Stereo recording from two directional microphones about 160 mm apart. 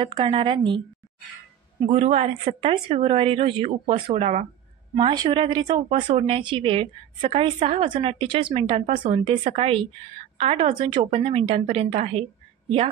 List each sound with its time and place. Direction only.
0.0 s a woman's voice: 35° right (ahead or behind)
1.9 s a woman's voice: 40° right (ahead or behind)
4.9 s a woman's voice: 25° right (ahead or behind)
9.1 s a woman's voice: 30° right (ahead or behind)
11.0 s a woman's voice: 40° right (ahead or behind)